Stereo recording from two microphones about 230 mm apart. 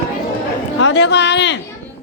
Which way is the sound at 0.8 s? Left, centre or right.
Left.